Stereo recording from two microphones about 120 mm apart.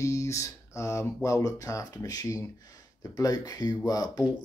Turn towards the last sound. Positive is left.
turn(degrees=30)  # may be behind; listen again after turning